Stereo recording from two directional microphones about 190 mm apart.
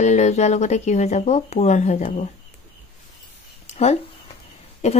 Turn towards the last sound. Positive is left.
turn(degrees=35)  # may be behind; listen again after turning